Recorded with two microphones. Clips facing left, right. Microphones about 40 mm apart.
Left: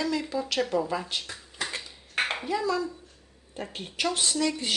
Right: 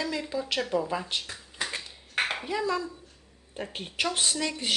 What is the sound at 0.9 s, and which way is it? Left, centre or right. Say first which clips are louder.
Speech: even; centre.